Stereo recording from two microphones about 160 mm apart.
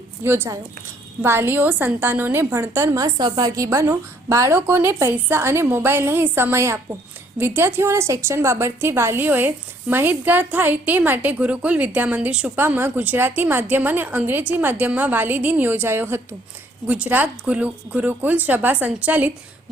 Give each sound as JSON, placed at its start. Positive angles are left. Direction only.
{"t": 0.2, "sound": "a woman's voice", "side_deg": -15}